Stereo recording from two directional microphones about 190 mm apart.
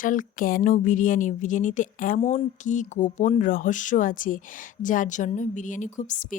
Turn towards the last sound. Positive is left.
turn(degrees=40)  # may be behind; listen again after turning